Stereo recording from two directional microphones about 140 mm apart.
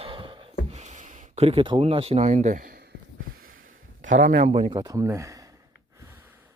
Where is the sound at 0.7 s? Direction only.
55° right (ahead or behind); by 2.8 s 85° right.